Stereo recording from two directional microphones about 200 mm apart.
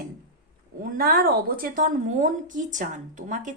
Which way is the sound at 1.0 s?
45° right (ahead or behind).